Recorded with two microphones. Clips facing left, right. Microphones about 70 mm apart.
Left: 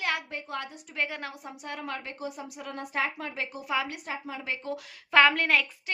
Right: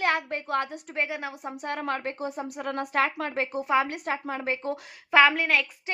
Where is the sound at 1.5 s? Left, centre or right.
Right.